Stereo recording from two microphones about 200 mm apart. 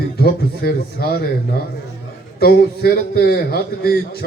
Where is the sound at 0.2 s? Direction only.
50° left (ahead or behind).